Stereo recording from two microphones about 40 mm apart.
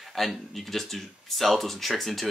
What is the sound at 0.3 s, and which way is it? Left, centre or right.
Speech, centre.